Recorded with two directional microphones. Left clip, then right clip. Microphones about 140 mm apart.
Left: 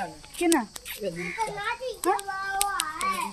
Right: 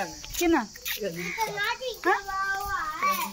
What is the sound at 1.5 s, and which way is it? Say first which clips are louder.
Speech: right 2 dB; 10° right (ahead or behind).